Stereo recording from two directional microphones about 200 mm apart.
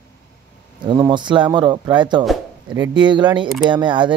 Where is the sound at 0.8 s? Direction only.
25° right (ahead or behind).